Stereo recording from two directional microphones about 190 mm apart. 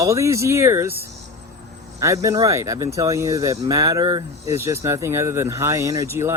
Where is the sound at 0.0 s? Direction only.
15° right (ahead or behind).